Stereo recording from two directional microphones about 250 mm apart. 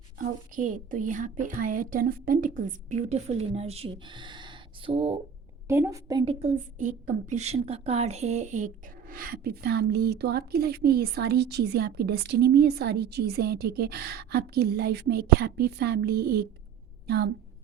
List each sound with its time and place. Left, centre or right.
0.2 s a woman's voice: right
5.6 s a woman's voice: centre
6.4 s a woman's voice: right